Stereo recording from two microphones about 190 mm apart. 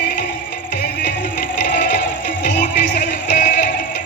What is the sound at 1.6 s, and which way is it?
Music, 60° left (ahead or behind).